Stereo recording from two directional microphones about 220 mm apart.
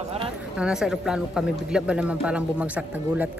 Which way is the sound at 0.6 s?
5° right (ahead or behind).